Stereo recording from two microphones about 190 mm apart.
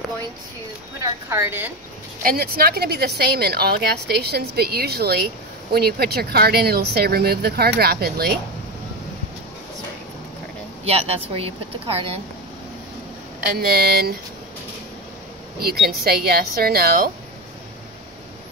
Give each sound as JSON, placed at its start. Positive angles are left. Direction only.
{"t": 1.3, "sound": "a woman's voice", "side_deg": -10}
{"t": 2.2, "sound": "speech", "side_deg": -50}
{"t": 10.9, "sound": "a woman's voice", "side_deg": -30}
{"t": 13.6, "sound": "speech", "side_deg": -55}
{"t": 16.0, "sound": "a woman's voice", "side_deg": -55}